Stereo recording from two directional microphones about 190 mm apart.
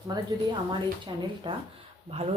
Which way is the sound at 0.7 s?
25° right (ahead or behind).